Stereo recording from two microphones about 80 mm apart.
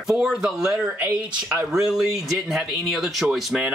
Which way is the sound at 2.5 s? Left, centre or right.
Centre.